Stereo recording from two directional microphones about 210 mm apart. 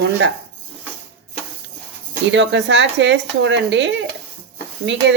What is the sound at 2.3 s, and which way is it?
Speech, 60° right (ahead or behind).